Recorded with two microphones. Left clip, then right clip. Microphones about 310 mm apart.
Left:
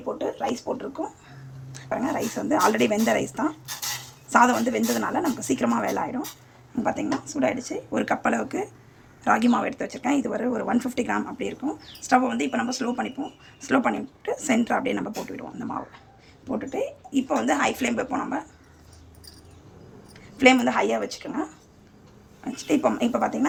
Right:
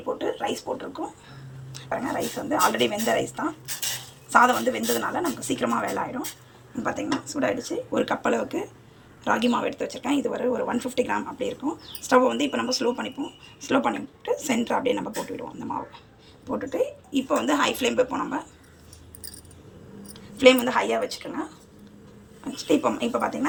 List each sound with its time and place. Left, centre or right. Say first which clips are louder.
0.2 s speech: even; centre
20.1 s a woman's voice: right 1 dB; centre
22.5 s speech: even; centre